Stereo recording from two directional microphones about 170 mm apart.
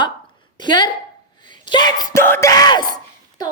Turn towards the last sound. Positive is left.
turn(degrees=25)  # may be behind; listen again after turning